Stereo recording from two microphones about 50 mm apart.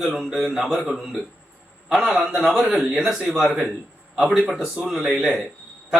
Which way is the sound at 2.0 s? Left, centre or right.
Centre.